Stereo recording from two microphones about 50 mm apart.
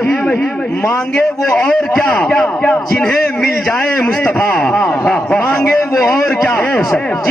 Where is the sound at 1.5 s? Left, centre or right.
Left.